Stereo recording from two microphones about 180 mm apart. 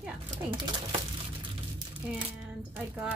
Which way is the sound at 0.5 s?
25° right (ahead or behind).